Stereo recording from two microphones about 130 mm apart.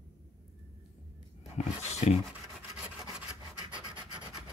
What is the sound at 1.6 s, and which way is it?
Dog, 55° left (ahead or behind).